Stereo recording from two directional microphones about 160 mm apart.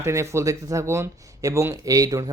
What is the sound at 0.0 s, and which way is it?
Speech, 15° right (ahead or behind).